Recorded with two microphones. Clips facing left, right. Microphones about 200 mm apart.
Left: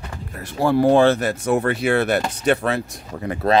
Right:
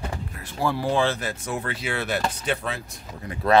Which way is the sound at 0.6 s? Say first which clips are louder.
Left 9 dB; 50° left (ahead or behind).